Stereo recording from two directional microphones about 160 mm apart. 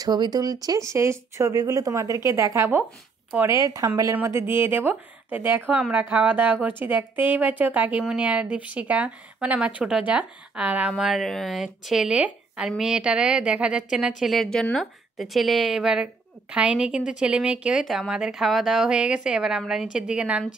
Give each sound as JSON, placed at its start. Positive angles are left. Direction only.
{"t": 0.0, "sound": "a woman's voice", "side_deg": -25}